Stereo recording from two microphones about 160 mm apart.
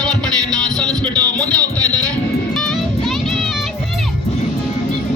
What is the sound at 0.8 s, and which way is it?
Music, 5° left (ahead or behind).